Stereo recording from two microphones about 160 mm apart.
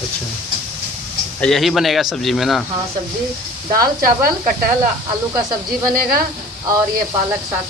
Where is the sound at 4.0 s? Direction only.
60° right (ahead or behind).